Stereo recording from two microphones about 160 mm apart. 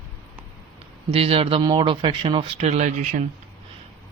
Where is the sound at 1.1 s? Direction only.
35° right (ahead or behind).